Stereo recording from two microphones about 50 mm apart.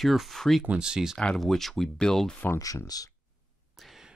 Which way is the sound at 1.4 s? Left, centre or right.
Centre.